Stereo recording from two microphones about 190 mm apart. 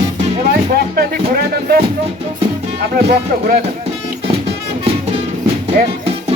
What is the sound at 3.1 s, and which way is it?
Speech, 50° right (ahead or behind).